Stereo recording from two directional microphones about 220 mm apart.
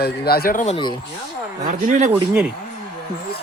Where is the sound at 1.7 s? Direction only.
35° right (ahead or behind).